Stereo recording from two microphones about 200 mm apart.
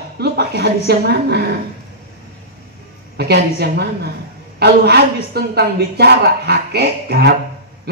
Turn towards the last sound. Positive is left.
turn(degrees=-55)  # may be behind; listen again after turning